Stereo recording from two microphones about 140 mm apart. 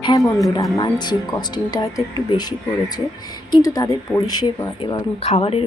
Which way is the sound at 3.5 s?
25° left (ahead or behind).